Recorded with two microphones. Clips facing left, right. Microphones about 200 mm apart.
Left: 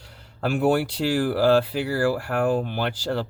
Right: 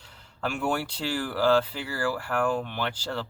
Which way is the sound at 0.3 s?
40° left (ahead or behind).